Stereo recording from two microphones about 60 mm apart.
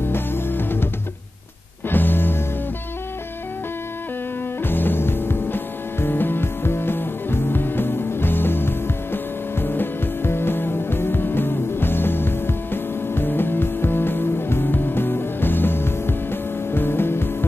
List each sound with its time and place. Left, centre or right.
0.1 s music: left
1.9 s music: left
4.6 s music: left